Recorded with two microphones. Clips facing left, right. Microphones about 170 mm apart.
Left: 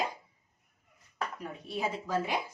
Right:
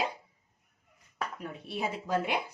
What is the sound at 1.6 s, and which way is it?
Speech, 60° right (ahead or behind).